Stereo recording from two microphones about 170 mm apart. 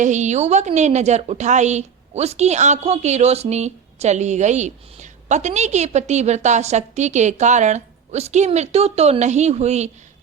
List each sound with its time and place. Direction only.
0.0 s a woman's voice: 45° right (ahead or behind)